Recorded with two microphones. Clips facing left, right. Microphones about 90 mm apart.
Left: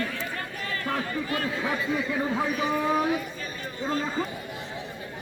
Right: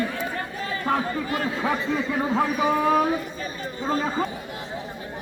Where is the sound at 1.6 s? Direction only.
35° right (ahead or behind).